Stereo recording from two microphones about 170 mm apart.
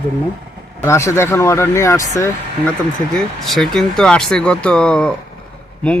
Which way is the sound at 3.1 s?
Centre (ahead or behind).